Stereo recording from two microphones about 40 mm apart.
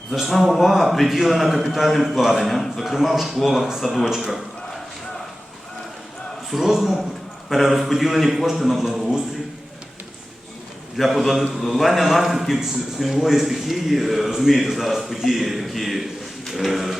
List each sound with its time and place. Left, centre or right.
0.1 s a man's voice: centre
4.2 s a sound: centre
6.5 s a man's voice: centre
10.9 s a man's voice: centre